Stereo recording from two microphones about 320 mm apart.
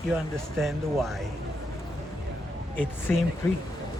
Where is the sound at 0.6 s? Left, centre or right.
Centre.